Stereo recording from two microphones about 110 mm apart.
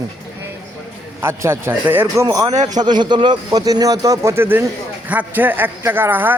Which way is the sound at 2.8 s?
45° right (ahead or behind).